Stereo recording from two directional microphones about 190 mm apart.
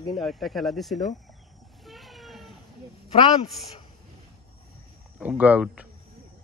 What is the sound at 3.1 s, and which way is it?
Speech, 30° left (ahead or behind).